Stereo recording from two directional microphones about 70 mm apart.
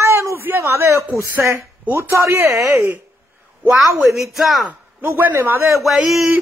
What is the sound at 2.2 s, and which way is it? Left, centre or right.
Speech, right.